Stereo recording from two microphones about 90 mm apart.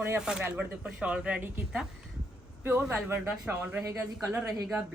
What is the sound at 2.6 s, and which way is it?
Speech, 20° right (ahead or behind).